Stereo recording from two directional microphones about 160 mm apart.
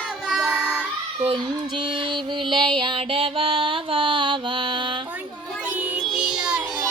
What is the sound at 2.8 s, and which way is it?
Music, 30° right (ahead or behind).